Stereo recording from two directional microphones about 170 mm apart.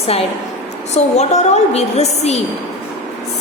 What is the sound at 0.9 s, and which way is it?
A woman's voice, 40° left (ahead or behind).